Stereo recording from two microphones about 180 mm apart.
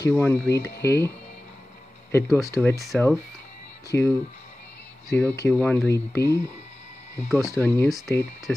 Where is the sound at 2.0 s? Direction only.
15° left (ahead or behind).